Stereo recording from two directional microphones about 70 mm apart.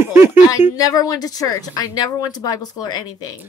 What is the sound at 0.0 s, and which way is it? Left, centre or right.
Speech, right.